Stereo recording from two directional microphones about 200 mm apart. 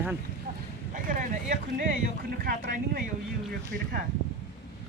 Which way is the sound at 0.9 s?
40° right (ahead or behind).